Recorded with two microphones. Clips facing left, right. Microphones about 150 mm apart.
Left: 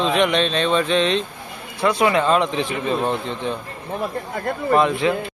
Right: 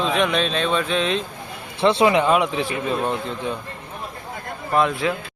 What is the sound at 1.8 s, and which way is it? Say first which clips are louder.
Speech: right 1 dB; 25° right (ahead or behind).